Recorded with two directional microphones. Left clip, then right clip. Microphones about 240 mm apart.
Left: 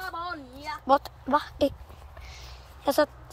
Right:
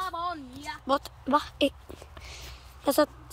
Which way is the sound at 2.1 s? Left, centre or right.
Right.